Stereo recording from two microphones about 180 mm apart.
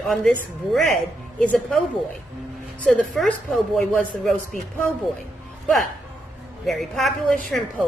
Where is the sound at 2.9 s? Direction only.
5° left (ahead or behind).